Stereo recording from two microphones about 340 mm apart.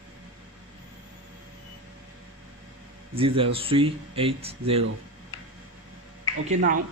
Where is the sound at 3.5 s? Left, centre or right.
Centre.